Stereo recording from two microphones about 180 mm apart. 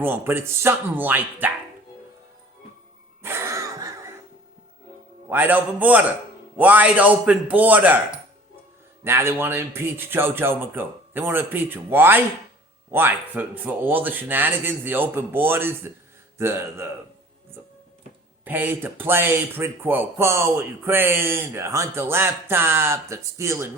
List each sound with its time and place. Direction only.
0.0 s speech: 10° right (ahead or behind)
3.2 s a sound: 15° right (ahead or behind)
5.3 s speech: 10° right (ahead or behind)
9.0 s speech: 15° right (ahead or behind)
18.4 s speech: 10° right (ahead or behind)